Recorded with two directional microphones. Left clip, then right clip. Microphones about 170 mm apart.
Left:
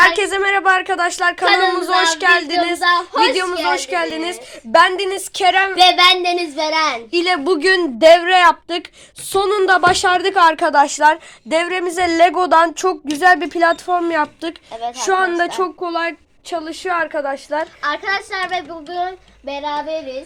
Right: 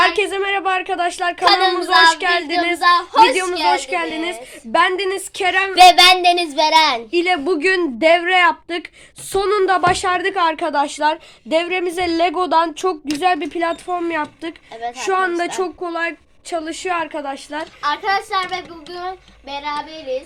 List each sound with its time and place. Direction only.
0.0 s a woman's voice: 5° left (ahead or behind)
5.8 s child singing: 30° right (ahead or behind)
7.1 s a woman's voice: 10° left (ahead or behind)
15.9 s a woman's voice: 10° left (ahead or behind)
17.8 s a child's voice: 35° left (ahead or behind)